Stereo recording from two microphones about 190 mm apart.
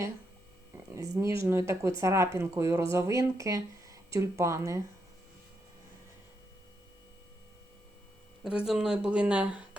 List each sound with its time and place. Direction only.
0.9 s speech: 15° right (ahead or behind)
8.4 s speech: 5° right (ahead or behind)